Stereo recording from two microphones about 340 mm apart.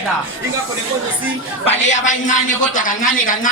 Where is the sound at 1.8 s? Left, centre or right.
Left.